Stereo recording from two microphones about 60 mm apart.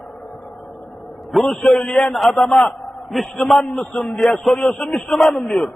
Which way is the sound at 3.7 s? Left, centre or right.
Centre.